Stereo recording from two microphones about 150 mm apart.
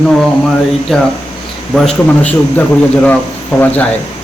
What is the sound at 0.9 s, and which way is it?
A man's voice, centre (ahead or behind).